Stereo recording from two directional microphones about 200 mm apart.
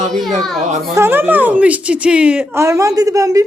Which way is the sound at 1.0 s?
10° right (ahead or behind).